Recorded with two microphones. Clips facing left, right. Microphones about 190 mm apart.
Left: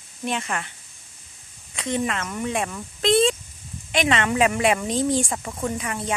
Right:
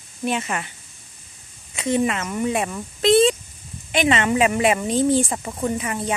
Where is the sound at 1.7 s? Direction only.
5° right (ahead or behind).